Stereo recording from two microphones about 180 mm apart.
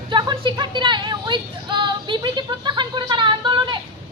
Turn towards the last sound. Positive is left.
turn(degrees=-25)  # may be behind; listen again after turning